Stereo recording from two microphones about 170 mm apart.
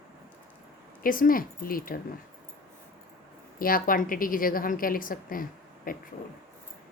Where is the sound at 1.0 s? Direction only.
55° left (ahead or behind).